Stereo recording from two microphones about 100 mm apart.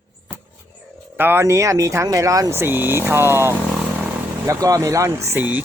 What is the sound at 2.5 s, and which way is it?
Speech, 20° right (ahead or behind).